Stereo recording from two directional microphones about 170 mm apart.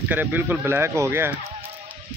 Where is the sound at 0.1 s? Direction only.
10° right (ahead or behind).